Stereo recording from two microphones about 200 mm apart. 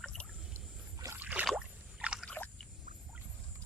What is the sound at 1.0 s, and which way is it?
Rowboat, 10° right (ahead or behind).